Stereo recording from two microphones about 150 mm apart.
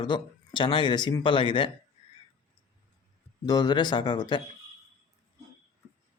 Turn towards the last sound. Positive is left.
turn(degrees=30)  # may be behind; listen again after turning